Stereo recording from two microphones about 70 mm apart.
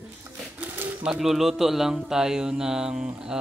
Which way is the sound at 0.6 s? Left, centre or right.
Right.